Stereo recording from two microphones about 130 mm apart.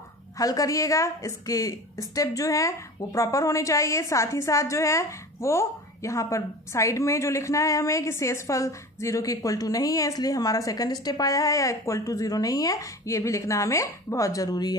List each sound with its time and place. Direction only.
0.4 s a woman's voice: 25° left (ahead or behind)